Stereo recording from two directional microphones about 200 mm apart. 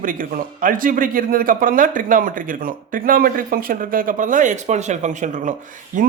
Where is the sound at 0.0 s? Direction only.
45° right (ahead or behind).